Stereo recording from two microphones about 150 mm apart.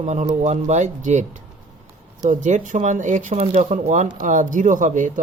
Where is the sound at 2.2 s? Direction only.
55° right (ahead or behind).